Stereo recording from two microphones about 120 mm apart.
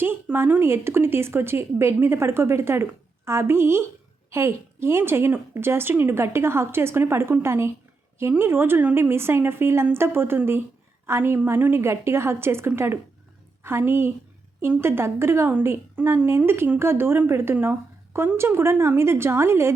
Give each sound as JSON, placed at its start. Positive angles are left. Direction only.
{"t": 0.0, "sound": "a woman's voice", "side_deg": -20}